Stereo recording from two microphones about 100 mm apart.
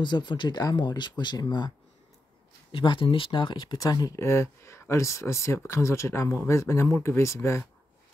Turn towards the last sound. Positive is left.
turn(degrees=30)  # may be behind; listen again after turning